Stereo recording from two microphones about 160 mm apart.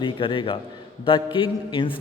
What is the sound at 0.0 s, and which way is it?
A man's voice, 30° left (ahead or behind).